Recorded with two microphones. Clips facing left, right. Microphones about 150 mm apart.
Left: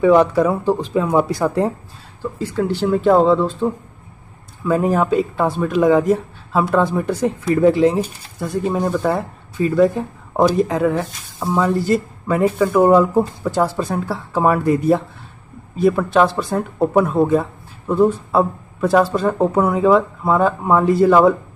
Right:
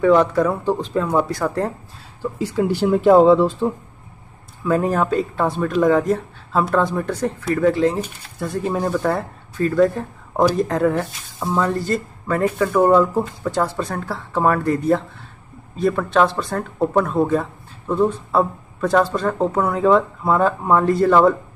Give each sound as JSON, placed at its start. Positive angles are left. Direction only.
{"t": 0.0, "sound": "speech", "side_deg": 10}
{"t": 2.3, "sound": "speech", "side_deg": -5}
{"t": 7.4, "sound": "speech", "side_deg": 20}
{"t": 8.4, "sound": "speech", "side_deg": 0}